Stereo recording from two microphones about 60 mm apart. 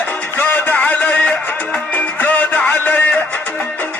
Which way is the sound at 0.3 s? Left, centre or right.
Left.